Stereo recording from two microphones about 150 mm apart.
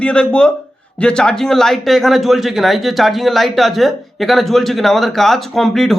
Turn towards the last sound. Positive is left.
turn(degrees=0)  # may be behind; listen again after turning